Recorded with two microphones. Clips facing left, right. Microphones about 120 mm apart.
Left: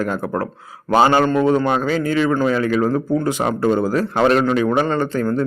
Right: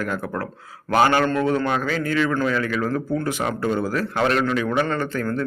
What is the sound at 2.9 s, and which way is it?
Speech, 15° left (ahead or behind).